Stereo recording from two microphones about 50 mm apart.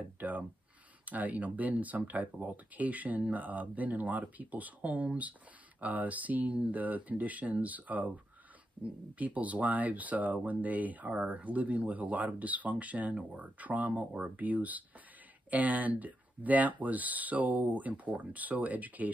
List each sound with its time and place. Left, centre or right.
0.2 s speech: right
9.2 s speech: right